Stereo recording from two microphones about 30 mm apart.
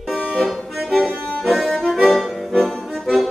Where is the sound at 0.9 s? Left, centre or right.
Centre.